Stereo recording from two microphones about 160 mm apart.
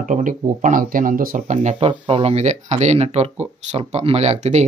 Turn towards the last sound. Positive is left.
turn(degrees=-45)  # may be behind; listen again after turning